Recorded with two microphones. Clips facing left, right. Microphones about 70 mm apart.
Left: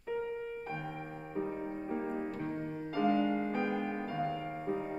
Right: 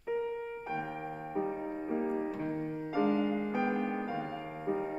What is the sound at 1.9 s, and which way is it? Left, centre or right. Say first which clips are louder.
Music: right 5 dB; centre.